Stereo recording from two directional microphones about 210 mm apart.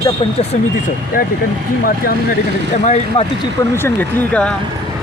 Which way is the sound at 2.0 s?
40° left (ahead or behind).